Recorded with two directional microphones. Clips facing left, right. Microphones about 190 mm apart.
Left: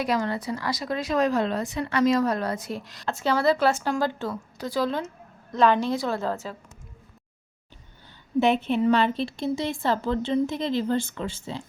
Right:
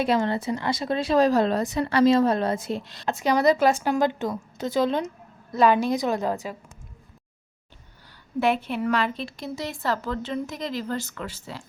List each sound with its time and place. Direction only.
0.0 s speech: 25° right (ahead or behind)
3.1 s a woman's voice: 15° right (ahead or behind)
5.5 s a woman's voice: 10° right (ahead or behind)
8.4 s a woman's voice: 20° left (ahead or behind)